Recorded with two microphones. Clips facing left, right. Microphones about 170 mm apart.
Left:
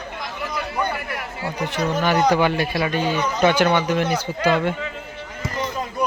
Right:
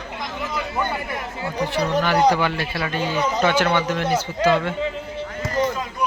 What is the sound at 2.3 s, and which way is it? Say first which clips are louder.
A man's voice: left 3 dB; 15° left (ahead or behind).